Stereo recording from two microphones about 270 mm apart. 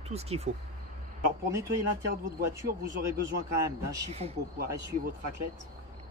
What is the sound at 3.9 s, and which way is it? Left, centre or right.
Speech, right.